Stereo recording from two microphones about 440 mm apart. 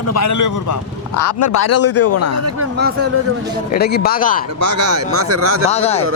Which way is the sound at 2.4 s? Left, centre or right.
Right.